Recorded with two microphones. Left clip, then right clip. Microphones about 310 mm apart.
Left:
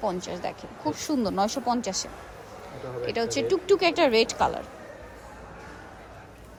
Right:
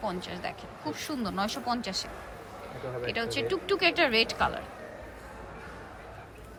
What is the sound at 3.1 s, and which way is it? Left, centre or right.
Speech, centre.